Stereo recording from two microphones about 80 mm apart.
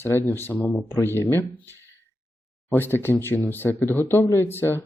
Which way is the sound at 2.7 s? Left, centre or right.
Left.